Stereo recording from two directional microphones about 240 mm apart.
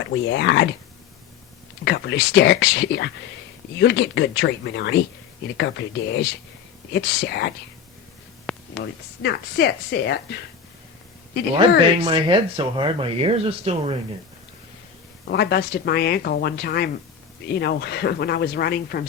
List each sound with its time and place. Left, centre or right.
0.0 s speech: left
1.8 s speech: left
8.5 s a sound: centre
8.8 s speech: left
12.0 s speech: centre
15.3 s speech: left